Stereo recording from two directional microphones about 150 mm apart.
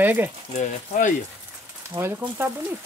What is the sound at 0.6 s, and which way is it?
Speech, 60° left (ahead or behind).